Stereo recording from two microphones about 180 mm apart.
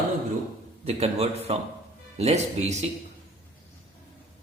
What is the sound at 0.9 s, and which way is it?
Speech, 35° right (ahead or behind).